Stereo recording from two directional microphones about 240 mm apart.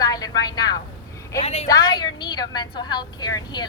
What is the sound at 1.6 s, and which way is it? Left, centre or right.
A woman's voice, centre.